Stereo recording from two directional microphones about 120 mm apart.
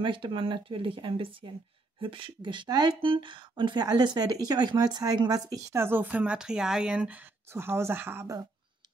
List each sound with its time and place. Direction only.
0.0 s speech: 45° right (ahead or behind); by 8.3 s 15° right (ahead or behind)